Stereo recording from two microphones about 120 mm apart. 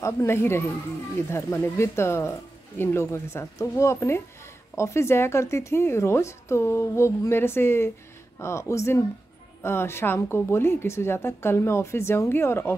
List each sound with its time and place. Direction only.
0.0 s a woman's voice: 20° left (ahead or behind)